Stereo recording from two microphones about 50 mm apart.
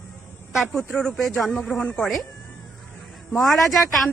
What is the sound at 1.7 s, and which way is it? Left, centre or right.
Speech, centre.